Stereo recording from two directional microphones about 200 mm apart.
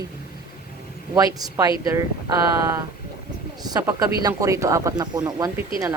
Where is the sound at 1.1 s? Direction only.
20° right (ahead or behind).